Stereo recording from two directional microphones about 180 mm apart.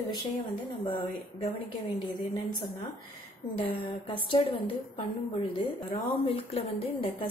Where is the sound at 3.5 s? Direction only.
30° left (ahead or behind).